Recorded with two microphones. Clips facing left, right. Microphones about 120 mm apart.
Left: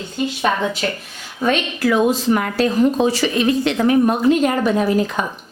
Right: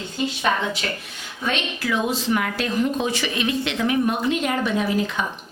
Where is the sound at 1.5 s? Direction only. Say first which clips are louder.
Left 7 dB; 45° left (ahead or behind).